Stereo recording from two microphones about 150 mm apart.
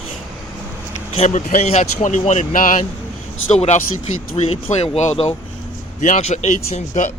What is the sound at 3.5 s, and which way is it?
Speech, 45° left (ahead or behind).